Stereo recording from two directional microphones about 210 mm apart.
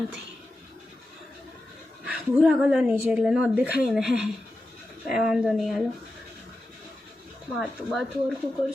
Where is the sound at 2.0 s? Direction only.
5° right (ahead or behind).